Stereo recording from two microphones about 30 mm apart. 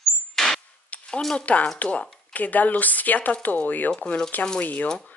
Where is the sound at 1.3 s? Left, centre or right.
Left.